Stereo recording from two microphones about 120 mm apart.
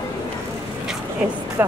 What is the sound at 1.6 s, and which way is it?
Music, 15° right (ahead or behind).